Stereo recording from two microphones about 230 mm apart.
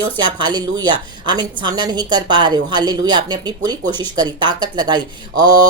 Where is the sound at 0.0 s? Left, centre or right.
Centre.